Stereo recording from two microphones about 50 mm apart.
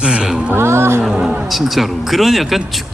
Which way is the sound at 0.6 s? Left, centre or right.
Right.